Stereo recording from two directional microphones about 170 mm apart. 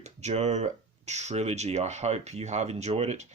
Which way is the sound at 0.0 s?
40° right (ahead or behind).